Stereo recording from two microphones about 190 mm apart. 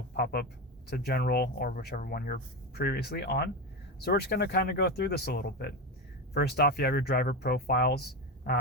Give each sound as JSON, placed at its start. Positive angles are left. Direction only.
{"t": 0.1, "sound": "speech", "side_deg": 55}